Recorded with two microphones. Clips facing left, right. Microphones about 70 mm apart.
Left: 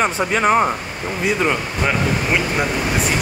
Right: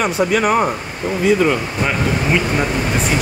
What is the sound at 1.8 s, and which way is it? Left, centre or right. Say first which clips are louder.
Speech: even; centre.